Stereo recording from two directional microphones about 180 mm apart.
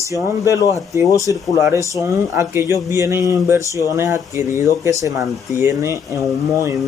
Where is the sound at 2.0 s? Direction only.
15° right (ahead or behind).